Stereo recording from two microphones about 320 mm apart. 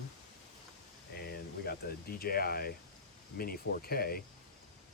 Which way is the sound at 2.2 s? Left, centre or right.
Left.